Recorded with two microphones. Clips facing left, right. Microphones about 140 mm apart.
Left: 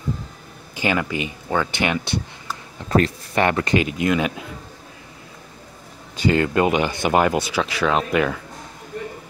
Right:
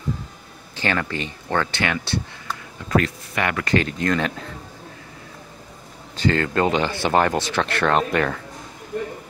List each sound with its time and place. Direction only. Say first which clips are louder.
0.7 s speech: left 2 dB; 10° left (ahead or behind)
2.9 s speech: left 2 dB; 30° left (ahead or behind)
3.7 s speech: left 1 dB; 10° left (ahead or behind)
6.1 s speech: left 2 dB; 15° left (ahead or behind)